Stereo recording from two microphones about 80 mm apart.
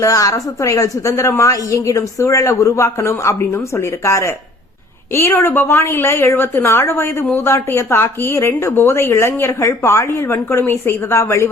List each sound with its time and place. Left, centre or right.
0.0 s a woman's voice: left